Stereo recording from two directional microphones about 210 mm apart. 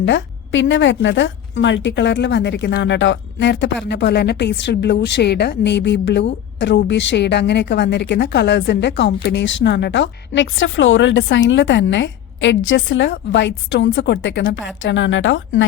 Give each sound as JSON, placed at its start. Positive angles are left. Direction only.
{"t": 0.0, "sound": "speech", "side_deg": 60}